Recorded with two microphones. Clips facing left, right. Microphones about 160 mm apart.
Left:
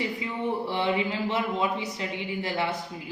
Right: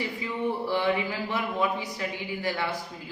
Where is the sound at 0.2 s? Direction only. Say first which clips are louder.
Even; 20° left (ahead or behind).